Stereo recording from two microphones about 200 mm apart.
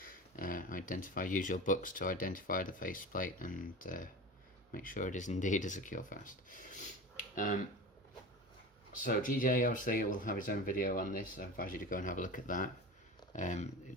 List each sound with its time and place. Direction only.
0.0 s speech: 45° left (ahead or behind)
9.0 s speech: 40° left (ahead or behind)